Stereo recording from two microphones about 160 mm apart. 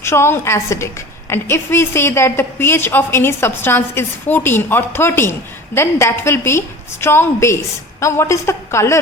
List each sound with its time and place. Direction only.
0.0 s a woman's voice: 15° left (ahead or behind)